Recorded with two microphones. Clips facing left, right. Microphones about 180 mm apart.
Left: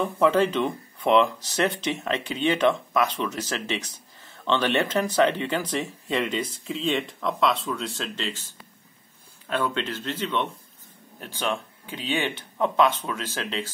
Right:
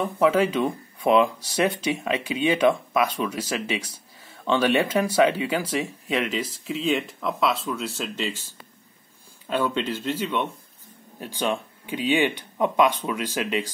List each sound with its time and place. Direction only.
0.0 s speech: 5° right (ahead or behind)
9.5 s speech: 10° right (ahead or behind)